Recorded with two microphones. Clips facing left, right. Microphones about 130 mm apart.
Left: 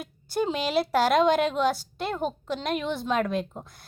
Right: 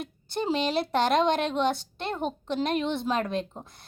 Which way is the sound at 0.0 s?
5° left (ahead or behind).